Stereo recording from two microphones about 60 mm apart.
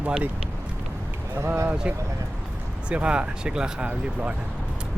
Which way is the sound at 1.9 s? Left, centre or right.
Right.